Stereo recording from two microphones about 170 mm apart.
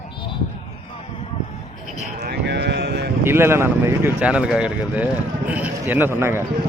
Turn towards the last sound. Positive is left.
turn(degrees=-15)  # may be behind; listen again after turning